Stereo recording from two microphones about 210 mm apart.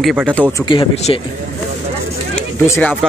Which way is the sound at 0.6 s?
25° left (ahead or behind).